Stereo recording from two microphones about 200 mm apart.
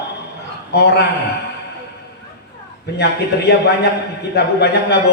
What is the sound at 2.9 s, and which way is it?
Speech, 55° left (ahead or behind).